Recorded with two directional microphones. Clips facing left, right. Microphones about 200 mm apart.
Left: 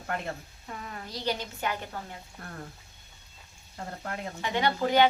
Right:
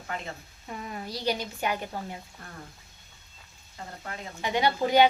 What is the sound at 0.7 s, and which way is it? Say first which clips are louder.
Speech: right 3 dB; 20° right (ahead or behind).